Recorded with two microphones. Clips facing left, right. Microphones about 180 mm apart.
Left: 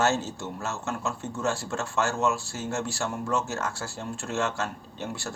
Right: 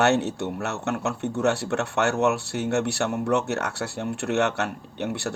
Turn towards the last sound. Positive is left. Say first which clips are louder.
# right 6 dB
turn(degrees=-70)  # may be behind; listen again after turning